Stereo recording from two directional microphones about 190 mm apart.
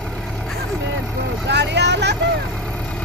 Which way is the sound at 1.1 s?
65° right (ahead or behind).